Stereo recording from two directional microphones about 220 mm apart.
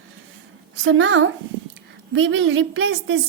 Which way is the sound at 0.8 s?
65° right (ahead or behind).